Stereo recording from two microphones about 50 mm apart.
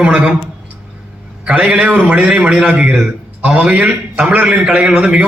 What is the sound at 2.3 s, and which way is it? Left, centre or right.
A man's voice, right.